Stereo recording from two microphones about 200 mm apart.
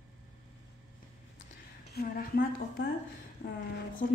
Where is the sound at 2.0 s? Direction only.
50° left (ahead or behind).